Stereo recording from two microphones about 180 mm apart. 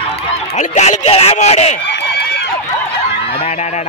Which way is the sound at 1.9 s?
65° left (ahead or behind).